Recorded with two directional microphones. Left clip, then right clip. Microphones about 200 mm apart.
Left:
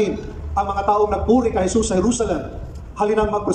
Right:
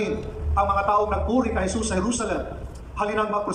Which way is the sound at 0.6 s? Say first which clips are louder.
Left 3 dB; 20° left (ahead or behind).